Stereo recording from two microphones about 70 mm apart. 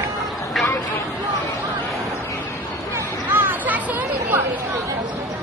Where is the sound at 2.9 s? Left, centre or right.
Right.